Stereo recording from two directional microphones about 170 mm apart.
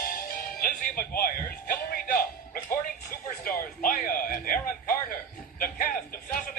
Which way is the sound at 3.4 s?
55° left (ahead or behind).